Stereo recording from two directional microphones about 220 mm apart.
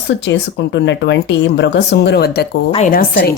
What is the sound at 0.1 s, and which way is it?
A woman's voice, 55° left (ahead or behind).